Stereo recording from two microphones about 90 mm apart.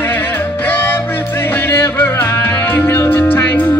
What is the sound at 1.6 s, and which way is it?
Music, 25° left (ahead or behind).